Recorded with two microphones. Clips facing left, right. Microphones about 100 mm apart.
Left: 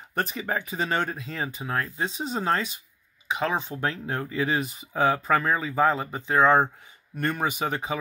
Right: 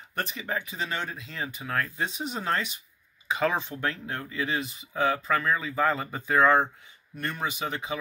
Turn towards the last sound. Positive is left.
turn(degrees=40)  # may be behind; listen again after turning